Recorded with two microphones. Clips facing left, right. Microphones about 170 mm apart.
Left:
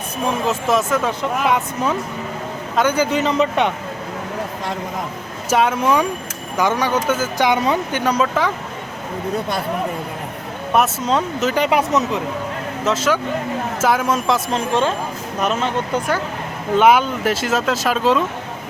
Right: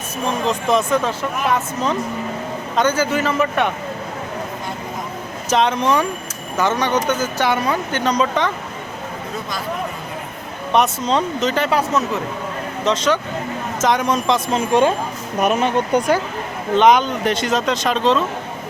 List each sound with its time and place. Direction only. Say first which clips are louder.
0.3 s a man's voice: even; 5° left (ahead or behind)
5.5 s speech: even; 5° left (ahead or behind)
8.0 s speech: right 1 dB; 5° left (ahead or behind)
10.7 s speech: even; 5° left (ahead or behind); by 12.2 s 20° left (ahead or behind)
12.8 s speech: even; 5° left (ahead or behind)
14.7 s speech: right 4 dB; 15° right (ahead or behind)
16.7 s speech: even; 5° left (ahead or behind)